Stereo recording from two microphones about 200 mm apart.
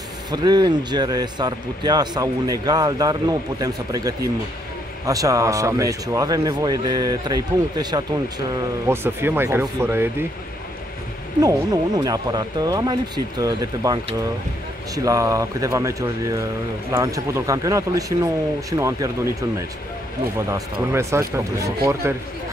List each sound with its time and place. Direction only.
0.3 s speech: 20° right (ahead or behind)
11.4 s speech: 20° right (ahead or behind)
15.0 s speech: 15° right (ahead or behind)
20.4 s speech: 15° right (ahead or behind)